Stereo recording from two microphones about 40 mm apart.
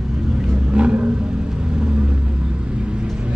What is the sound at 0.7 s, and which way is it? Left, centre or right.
Vehicle, right.